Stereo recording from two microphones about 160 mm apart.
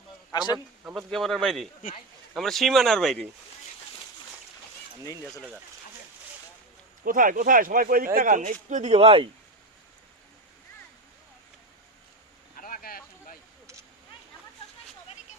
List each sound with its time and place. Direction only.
0.3 s speech: 25° left (ahead or behind)
0.9 s speech: centre (ahead or behind)
5.0 s speech: 20° left (ahead or behind)
7.0 s speech: 60° right (ahead or behind); by 9.3 s 35° right (ahead or behind)
12.5 s a sound: 60° left (ahead or behind)